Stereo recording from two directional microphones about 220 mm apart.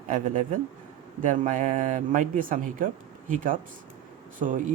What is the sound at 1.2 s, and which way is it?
Speech, 35° right (ahead or behind).